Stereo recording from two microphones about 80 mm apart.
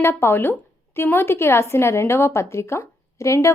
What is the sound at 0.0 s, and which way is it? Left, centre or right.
A woman's voice, left.